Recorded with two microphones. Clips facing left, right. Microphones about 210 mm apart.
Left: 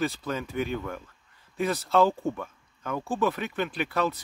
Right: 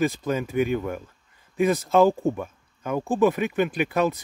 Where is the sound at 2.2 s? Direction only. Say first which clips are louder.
Right 5 dB; 20° right (ahead or behind).